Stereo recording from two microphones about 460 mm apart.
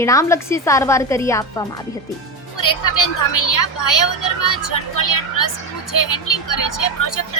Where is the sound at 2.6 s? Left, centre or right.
Left.